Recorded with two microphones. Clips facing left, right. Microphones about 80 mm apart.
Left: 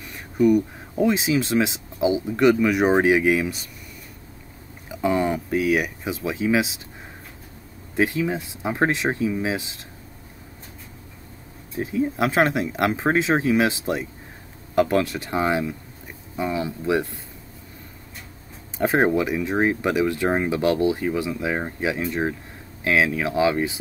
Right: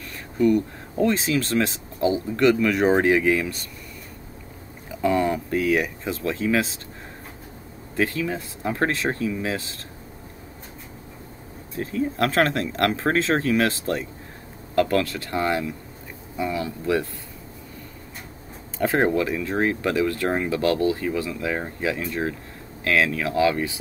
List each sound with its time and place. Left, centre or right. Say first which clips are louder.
0.0 s speech: left 2 dB; centre
4.8 s speech: even; centre
7.9 s speech: left 2 dB; centre
11.7 s speech: left 2 dB; centre
18.8 s speech: left 1 dB; centre